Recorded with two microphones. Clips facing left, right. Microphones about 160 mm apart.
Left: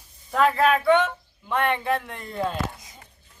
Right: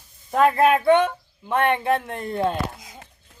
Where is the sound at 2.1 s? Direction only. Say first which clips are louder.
Right 7 dB; 50° right (ahead or behind).